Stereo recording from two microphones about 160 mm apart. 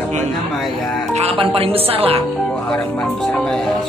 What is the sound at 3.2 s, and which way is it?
Speech, 5° left (ahead or behind).